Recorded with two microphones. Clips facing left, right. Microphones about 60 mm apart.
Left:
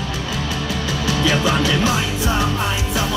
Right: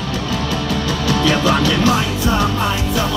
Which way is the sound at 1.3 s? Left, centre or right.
Right.